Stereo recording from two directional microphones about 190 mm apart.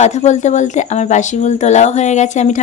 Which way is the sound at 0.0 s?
40° left (ahead or behind).